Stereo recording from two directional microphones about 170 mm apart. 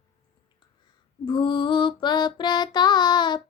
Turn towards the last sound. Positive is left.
turn(degrees=25)  # may be behind; listen again after turning